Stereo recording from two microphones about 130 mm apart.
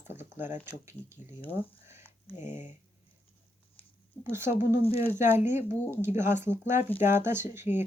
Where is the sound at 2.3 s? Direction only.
70° left (ahead or behind).